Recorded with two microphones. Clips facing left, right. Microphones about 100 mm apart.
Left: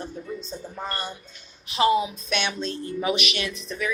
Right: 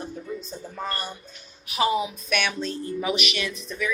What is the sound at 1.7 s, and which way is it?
Speech, 25° left (ahead or behind).